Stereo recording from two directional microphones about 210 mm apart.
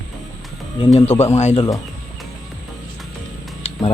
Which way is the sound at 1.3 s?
30° left (ahead or behind).